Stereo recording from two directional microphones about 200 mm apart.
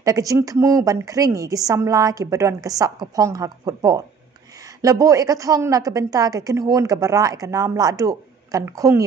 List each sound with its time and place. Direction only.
0.0 s a woman's voice: 15° right (ahead or behind)